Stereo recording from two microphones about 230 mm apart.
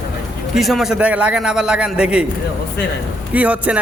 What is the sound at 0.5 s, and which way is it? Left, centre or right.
A man's voice, centre.